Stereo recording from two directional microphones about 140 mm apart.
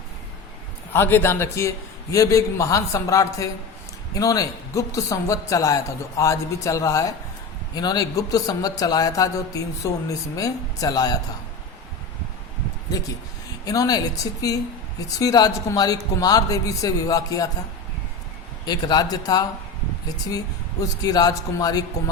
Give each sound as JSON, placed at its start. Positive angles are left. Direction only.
{"t": 0.9, "sound": "a man's voice", "side_deg": 15}
{"t": 13.7, "sound": "a man's voice", "side_deg": 25}
{"t": 18.6, "sound": "a man's voice", "side_deg": 30}